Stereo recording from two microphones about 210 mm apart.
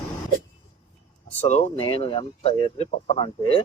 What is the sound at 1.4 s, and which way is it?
Speech, 35° left (ahead or behind).